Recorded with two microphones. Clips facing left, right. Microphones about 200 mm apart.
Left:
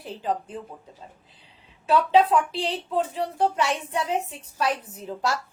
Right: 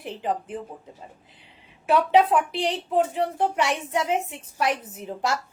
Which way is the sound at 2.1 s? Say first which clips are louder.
Even; 15° right (ahead or behind).